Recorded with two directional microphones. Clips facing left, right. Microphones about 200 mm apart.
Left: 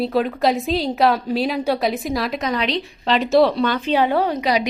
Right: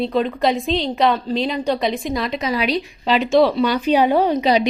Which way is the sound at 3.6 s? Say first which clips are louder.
Right 2 dB; 15° right (ahead or behind).